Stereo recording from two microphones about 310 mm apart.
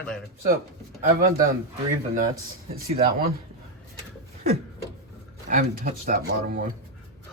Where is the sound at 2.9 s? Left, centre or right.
Right.